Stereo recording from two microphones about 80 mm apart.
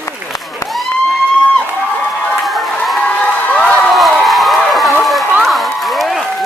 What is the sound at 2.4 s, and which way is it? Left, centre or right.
Crowd, centre.